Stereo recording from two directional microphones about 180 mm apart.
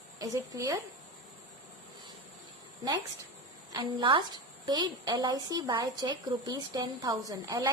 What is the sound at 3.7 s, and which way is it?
A woman's voice, 25° right (ahead or behind).